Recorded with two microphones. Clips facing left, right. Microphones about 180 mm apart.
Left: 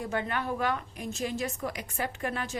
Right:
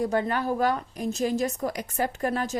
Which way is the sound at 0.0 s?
40° right (ahead or behind).